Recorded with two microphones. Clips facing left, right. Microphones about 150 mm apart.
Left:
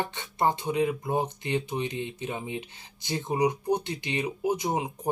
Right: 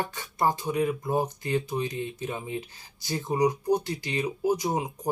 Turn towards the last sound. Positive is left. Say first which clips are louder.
# even
turn(degrees=25)  # may be behind; listen again after turning